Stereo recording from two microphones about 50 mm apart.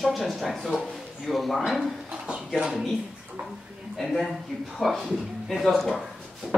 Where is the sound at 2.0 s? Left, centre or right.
Centre.